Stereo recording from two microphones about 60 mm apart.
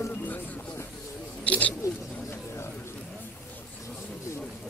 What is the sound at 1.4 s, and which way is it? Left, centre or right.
Speech, left.